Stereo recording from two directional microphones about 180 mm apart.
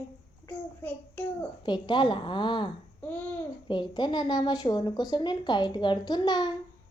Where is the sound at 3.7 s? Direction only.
25° left (ahead or behind).